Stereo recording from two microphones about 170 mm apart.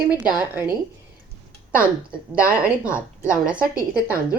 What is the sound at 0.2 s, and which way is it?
Speech, 10° right (ahead or behind).